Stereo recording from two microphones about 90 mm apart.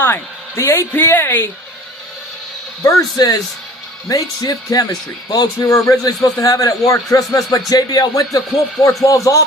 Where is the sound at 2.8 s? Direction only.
40° left (ahead or behind).